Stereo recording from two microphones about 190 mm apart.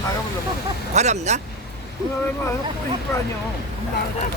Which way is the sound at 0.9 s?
35° right (ahead or behind).